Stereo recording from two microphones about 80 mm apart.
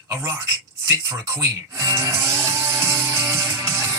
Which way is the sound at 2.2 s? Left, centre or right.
Right.